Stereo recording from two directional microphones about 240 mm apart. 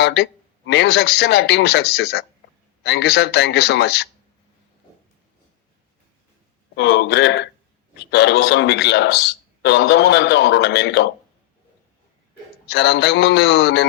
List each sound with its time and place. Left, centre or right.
0.0 s a man's voice: left
6.7 s a man's voice: left
12.6 s a man's voice: left